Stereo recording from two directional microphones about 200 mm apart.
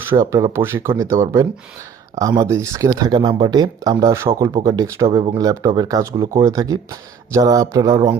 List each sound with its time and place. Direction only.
0.1 s speech: 15° right (ahead or behind)